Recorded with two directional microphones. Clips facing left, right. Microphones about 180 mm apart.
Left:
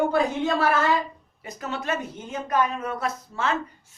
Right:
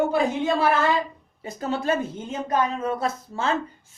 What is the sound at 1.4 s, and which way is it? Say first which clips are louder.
Speech: right 5 dB; 30° right (ahead or behind).